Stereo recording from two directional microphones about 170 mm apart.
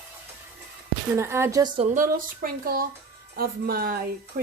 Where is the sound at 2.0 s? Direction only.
55° right (ahead or behind).